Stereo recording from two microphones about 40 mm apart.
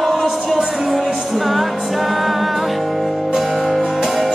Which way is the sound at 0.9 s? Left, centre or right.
Centre.